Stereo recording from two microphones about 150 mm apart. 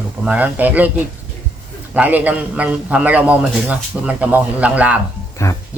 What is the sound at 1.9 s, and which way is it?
A man's voice, 10° right (ahead or behind).